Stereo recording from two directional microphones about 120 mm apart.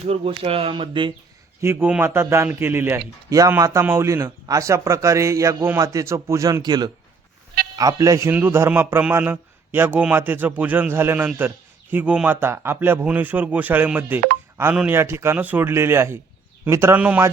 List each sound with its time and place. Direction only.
0.1 s speech: 55° right (ahead or behind)
1.6 s a man's voice: 15° right (ahead or behind)
8.3 s a man's voice: 15° right (ahead or behind)